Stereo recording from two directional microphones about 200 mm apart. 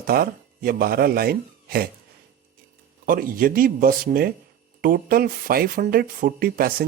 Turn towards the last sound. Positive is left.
turn(degrees=-45)  # may be behind; listen again after turning